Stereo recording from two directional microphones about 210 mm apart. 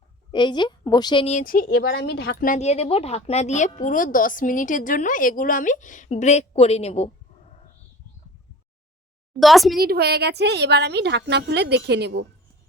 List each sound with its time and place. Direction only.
0.3 s a woman's voice: 20° left (ahead or behind)
9.4 s a woman's voice: centre (ahead or behind)
9.7 s a woman's voice: 45° right (ahead or behind)